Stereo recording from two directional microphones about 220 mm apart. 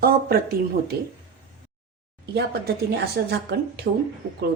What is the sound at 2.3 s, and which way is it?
Speech, 45° right (ahead or behind).